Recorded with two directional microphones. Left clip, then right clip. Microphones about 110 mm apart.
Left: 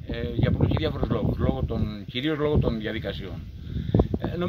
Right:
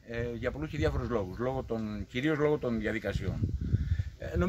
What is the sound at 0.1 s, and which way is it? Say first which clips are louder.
Speech: left 5 dB; 10° right (ahead or behind).